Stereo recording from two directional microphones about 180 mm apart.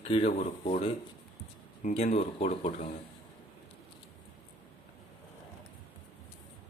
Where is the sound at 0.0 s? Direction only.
35° left (ahead or behind).